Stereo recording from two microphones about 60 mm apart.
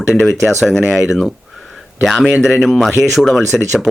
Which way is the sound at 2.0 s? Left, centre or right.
Centre.